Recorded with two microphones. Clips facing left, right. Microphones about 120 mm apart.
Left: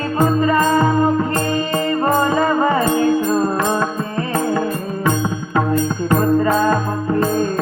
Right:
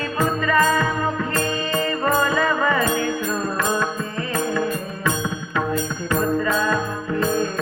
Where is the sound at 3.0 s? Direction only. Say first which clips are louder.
Left 8 dB; 25° left (ahead or behind).